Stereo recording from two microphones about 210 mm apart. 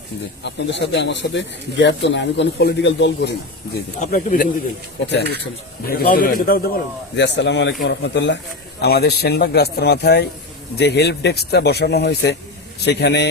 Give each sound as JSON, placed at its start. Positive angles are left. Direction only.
{"t": 0.4, "sound": "speech", "side_deg": 55}
{"t": 3.8, "sound": "speech", "side_deg": 40}
{"t": 5.8, "sound": "speech", "side_deg": 45}
{"t": 7.2, "sound": "speech", "side_deg": 55}